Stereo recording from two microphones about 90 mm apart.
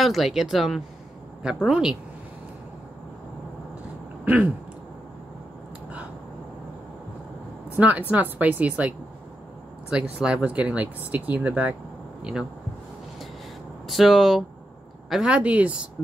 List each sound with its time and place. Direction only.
0.0 s speech: centre (ahead or behind)
4.2 s a sound: 15° right (ahead or behind)
7.7 s speech: 15° right (ahead or behind)
12.2 s speech: 10° right (ahead or behind)
13.8 s speech: centre (ahead or behind)